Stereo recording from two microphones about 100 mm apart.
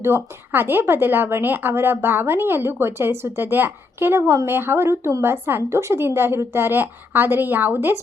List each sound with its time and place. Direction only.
0.0 s a woman's voice: 25° right (ahead or behind)